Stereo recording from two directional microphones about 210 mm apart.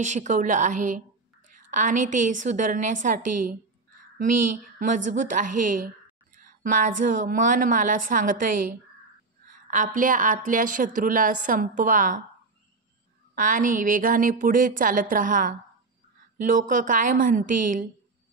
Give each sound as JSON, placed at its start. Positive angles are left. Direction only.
{"t": 0.0, "sound": "a woman's voice", "side_deg": -35}
{"t": 13.3, "sound": "a woman's voice", "side_deg": -40}